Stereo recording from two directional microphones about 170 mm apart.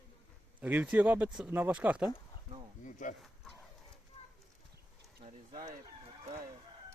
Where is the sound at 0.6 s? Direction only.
10° right (ahead or behind).